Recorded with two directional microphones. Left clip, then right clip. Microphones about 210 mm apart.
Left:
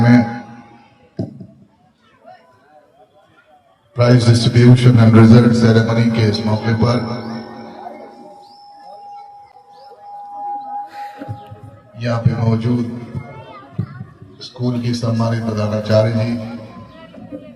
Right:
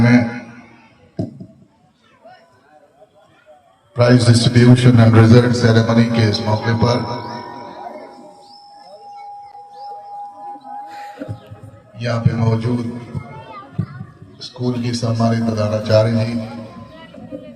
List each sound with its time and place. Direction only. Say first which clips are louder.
0.0 s a sound: left 1 dB; 20° right (ahead or behind)
3.9 s a man's voice: right 1 dB; 20° right (ahead or behind)
10.8 s music: left 2 dB; 5° right (ahead or behind)
11.9 s a man's voice: even; 20° right (ahead or behind)
13.2 s music: right 1 dB; 45° right (ahead or behind)
14.3 s a man's voice: even; 20° right (ahead or behind)
16.7 s music: even; 50° right (ahead or behind)